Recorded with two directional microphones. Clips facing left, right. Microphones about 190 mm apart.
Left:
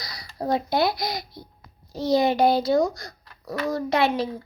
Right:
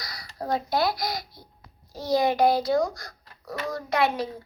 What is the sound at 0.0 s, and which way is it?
A child's voice, 20° left (ahead or behind).